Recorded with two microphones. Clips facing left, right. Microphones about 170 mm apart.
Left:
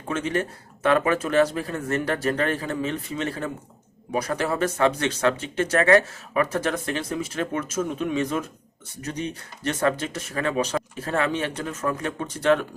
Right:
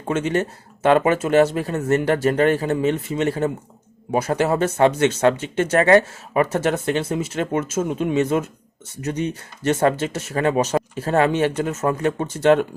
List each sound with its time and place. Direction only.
0.1 s speech: 25° right (ahead or behind)
9.6 s speech: 25° right (ahead or behind)